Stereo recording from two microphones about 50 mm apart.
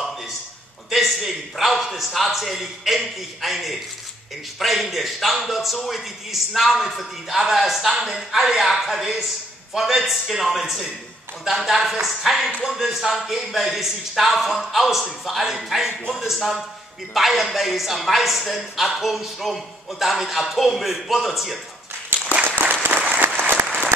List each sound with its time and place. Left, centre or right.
0.8 s a man's voice: centre
22.9 s applause: right